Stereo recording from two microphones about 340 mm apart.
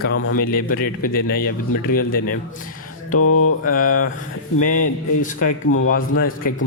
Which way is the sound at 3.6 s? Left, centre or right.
Left.